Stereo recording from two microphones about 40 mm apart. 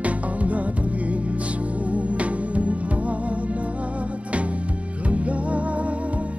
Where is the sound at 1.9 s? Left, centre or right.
Right.